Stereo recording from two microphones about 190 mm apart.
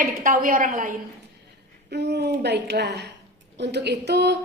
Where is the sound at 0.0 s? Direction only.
45° right (ahead or behind).